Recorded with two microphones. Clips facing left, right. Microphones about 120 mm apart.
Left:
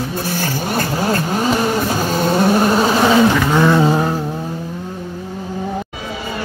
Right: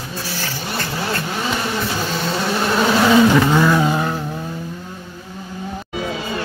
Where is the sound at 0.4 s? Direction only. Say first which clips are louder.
Left 6 dB; 45° left (ahead or behind).